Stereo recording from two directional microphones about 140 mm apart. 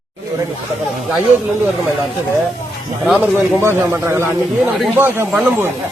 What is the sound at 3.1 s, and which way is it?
A man's voice, 15° right (ahead or behind).